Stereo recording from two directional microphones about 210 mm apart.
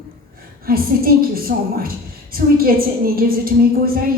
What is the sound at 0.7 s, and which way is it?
A woman's voice, 45° right (ahead or behind).